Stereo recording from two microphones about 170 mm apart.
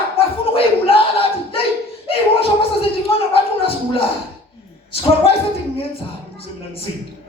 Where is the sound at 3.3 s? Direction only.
35° left (ahead or behind).